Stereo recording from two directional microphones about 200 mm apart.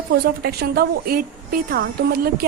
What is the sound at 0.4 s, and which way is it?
A woman's voice, 50° right (ahead or behind).